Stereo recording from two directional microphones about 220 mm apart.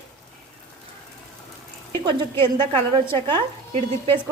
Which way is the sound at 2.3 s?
10° left (ahead or behind).